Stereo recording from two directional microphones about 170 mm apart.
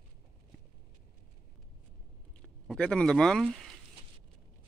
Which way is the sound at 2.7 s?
5° left (ahead or behind).